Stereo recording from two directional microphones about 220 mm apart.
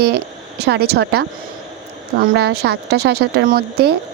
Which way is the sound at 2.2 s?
45° right (ahead or behind).